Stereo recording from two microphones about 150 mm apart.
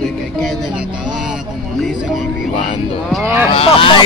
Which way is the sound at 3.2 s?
15° right (ahead or behind).